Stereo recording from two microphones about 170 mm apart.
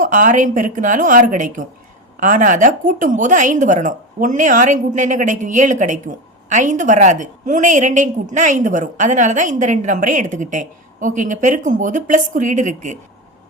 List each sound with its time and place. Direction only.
0.0 s a woman's voice: 50° right (ahead or behind)